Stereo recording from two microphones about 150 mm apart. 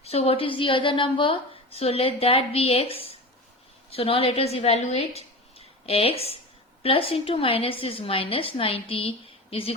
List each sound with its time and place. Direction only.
0.0 s a woman's voice: 40° left (ahead or behind)